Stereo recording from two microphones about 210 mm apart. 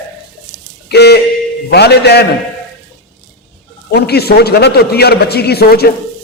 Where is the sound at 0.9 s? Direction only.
50° left (ahead or behind).